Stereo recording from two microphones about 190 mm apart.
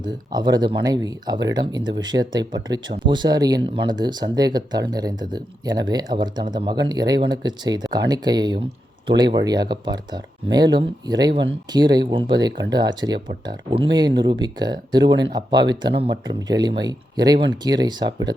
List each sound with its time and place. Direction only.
0.0 s speech: 25° right (ahead or behind)
1.8 s speech: 85° right
2.0 s speech: 20° right (ahead or behind)